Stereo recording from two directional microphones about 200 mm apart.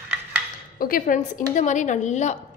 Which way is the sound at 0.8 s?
45° left (ahead or behind).